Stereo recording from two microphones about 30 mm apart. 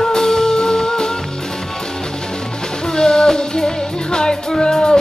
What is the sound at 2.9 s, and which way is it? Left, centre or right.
Music, left.